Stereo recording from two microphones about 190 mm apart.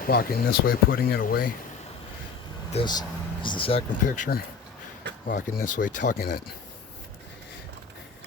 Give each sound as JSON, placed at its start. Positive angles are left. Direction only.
{"t": 0.0, "sound": "speech", "side_deg": 50}
{"t": 2.7, "sound": "speech", "side_deg": 20}
{"t": 5.3, "sound": "speech", "side_deg": 45}